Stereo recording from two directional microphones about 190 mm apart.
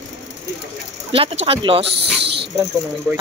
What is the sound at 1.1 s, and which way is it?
Speech, 30° right (ahead or behind).